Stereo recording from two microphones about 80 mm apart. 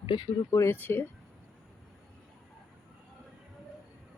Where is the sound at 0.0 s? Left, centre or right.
Left.